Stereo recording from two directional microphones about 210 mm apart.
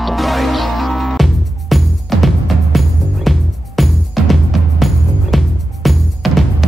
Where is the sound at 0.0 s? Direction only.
Centre (ahead or behind).